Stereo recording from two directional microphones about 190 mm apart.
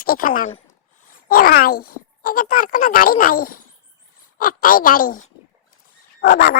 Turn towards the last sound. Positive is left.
turn(degrees=60)  # may be behind; listen again after turning